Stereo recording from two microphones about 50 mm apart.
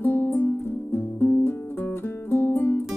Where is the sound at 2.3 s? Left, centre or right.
Left.